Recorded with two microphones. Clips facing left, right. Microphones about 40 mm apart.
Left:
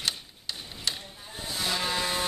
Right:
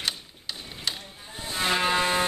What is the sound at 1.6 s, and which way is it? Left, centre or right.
Vehicle, right.